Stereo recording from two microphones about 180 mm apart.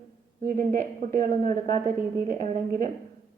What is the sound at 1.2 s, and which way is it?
A woman's voice, 45° right (ahead or behind).